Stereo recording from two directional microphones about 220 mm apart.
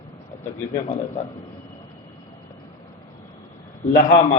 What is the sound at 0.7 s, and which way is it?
Speech, 30° left (ahead or behind).